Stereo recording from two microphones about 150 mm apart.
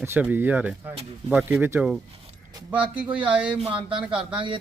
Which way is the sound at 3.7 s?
35° right (ahead or behind).